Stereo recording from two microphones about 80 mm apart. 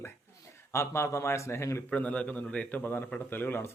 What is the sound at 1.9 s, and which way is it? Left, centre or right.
A man's voice, centre.